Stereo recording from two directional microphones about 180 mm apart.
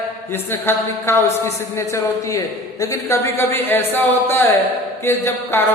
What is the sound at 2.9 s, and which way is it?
Speech, 15° left (ahead or behind).